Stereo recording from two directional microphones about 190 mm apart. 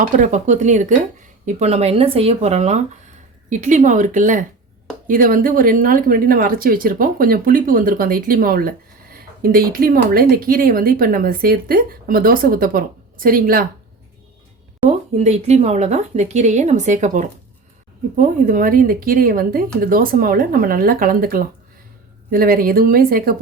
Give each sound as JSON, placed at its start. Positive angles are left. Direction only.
{"t": 0.2, "sound": "speech", "side_deg": -40}
{"t": 14.8, "sound": "speech", "side_deg": -35}